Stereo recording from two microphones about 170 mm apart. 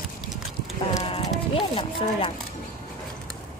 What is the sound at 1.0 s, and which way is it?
Run, 35° left (ahead or behind).